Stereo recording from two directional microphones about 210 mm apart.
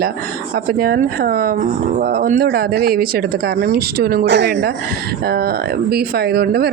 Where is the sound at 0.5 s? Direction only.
45° right (ahead or behind).